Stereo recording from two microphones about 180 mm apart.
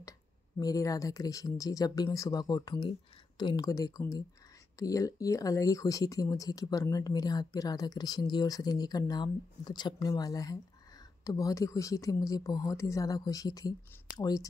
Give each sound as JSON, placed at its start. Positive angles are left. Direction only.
{"t": 0.6, "sound": "speech", "side_deg": 20}